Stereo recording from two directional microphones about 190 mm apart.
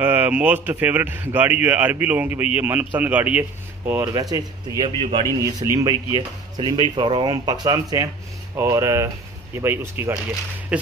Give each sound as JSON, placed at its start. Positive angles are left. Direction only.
{"t": 0.0, "sound": "a man's voice", "side_deg": -10}